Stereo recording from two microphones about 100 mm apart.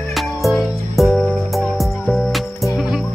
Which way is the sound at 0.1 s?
Centre (ahead or behind).